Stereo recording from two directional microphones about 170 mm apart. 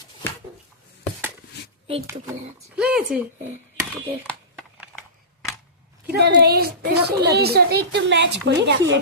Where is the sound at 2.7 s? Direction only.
5° right (ahead or behind).